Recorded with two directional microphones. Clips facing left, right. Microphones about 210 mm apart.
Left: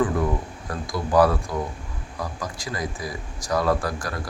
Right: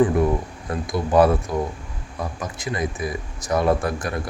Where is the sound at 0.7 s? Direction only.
25° right (ahead or behind).